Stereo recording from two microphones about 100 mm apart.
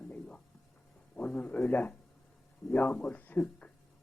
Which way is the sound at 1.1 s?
15° left (ahead or behind).